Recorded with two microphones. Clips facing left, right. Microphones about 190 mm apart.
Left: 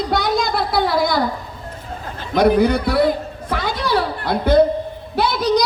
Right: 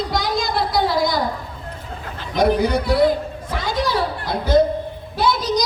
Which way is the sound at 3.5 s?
60° left (ahead or behind).